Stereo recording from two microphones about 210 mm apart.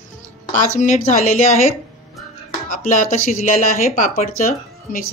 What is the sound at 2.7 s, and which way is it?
Speech, 40° left (ahead or behind).